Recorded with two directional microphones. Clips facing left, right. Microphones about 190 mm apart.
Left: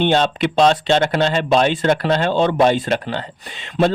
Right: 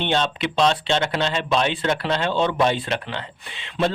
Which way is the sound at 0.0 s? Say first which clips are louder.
Left 6 dB; 45° left (ahead or behind).